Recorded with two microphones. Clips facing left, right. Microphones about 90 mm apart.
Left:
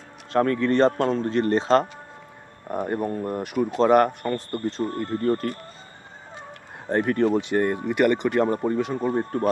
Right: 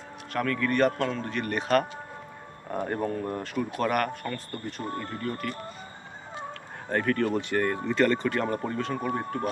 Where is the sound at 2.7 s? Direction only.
15° left (ahead or behind).